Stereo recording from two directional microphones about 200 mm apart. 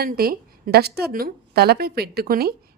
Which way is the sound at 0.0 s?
50° right (ahead or behind).